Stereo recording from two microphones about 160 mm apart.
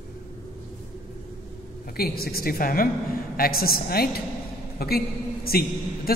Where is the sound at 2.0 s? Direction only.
70° left (ahead or behind).